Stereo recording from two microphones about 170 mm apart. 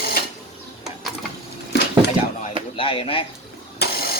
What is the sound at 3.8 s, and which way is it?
Vehicle, 70° left (ahead or behind).